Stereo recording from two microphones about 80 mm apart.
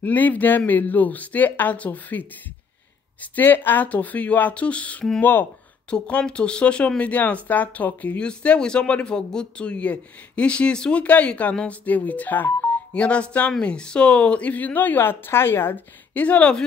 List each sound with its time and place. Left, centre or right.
0.0 s speech: left
5.9 s speech: centre